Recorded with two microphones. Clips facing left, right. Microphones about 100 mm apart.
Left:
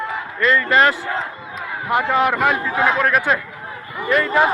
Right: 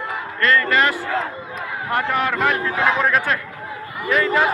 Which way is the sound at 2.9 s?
Centre (ahead or behind).